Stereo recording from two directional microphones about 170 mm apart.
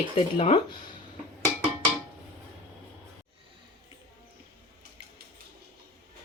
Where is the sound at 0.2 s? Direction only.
30° left (ahead or behind).